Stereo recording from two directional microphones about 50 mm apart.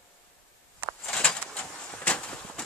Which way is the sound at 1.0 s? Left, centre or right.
Left.